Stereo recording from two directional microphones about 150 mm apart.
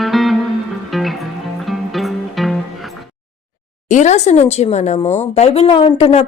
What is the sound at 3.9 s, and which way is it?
Speech, 50° left (ahead or behind).